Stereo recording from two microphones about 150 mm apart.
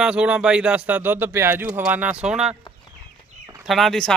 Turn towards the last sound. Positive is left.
turn(degrees=5)  # may be behind; listen again after turning